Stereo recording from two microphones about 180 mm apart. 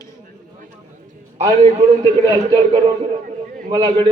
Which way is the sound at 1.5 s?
25° right (ahead or behind).